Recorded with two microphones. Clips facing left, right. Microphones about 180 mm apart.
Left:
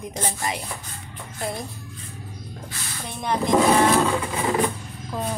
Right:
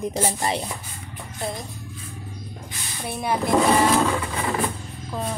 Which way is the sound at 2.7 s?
10° right (ahead or behind).